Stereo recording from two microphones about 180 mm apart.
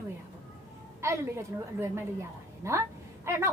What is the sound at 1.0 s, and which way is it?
A woman's voice, 15° right (ahead or behind).